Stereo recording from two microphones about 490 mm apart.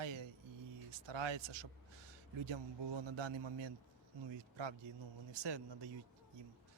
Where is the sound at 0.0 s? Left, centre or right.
Right.